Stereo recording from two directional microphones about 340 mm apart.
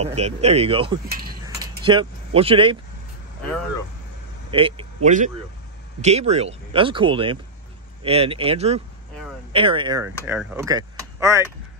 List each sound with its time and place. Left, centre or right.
0.0 s speech: centre
1.0 s mechanisms: right
1.4 s keys jangling: centre
4.5 s speech: centre